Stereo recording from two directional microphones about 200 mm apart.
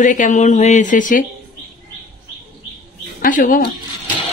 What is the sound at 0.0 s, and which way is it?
A woman's voice, 40° left (ahead or behind).